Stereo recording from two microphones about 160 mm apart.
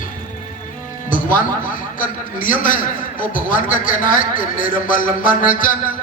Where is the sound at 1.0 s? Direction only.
55° left (ahead or behind).